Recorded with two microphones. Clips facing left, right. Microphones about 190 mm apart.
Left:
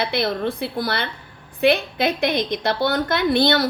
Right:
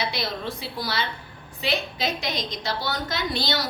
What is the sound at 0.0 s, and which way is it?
A woman's voice, 55° left (ahead or behind).